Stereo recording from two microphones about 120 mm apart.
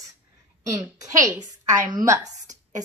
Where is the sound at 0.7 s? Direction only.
30° right (ahead or behind).